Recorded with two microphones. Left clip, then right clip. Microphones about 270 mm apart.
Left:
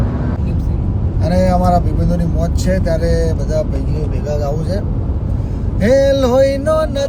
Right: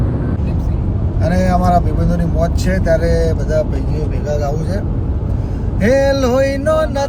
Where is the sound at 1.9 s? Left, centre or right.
Centre.